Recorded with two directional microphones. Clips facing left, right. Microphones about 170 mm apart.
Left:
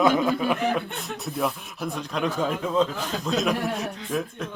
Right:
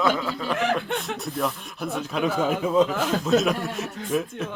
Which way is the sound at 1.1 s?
Centre (ahead or behind).